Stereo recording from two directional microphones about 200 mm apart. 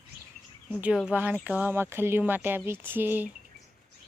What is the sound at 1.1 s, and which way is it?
Speech, 5° right (ahead or behind).